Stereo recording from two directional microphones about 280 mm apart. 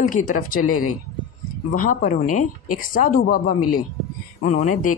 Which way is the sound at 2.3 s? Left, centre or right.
Left.